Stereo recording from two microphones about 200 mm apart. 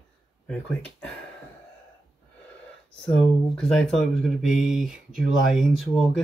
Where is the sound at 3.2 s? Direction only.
5° left (ahead or behind).